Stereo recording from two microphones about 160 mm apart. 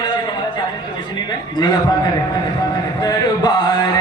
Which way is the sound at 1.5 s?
25° left (ahead or behind).